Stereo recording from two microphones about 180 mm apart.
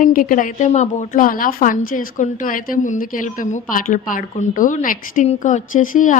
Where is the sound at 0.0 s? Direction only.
50° left (ahead or behind).